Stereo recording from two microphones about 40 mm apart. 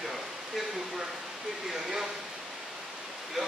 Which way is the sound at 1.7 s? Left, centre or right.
Centre.